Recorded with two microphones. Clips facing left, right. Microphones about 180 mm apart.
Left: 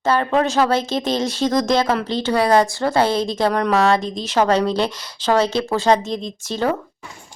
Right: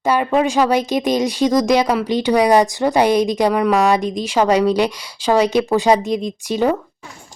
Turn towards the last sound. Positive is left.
turn(degrees=-15)  # may be behind; listen again after turning